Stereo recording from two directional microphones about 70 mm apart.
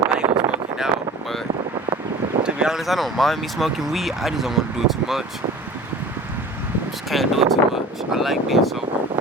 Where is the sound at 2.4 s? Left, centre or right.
Centre.